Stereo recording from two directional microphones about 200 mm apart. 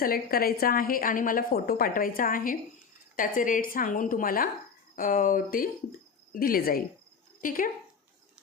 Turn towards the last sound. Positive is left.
turn(degrees=45)  # may be behind; listen again after turning